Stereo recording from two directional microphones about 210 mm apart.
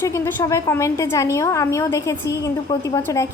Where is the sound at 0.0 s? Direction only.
15° left (ahead or behind).